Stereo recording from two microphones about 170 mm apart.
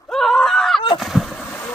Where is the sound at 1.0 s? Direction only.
Centre (ahead or behind).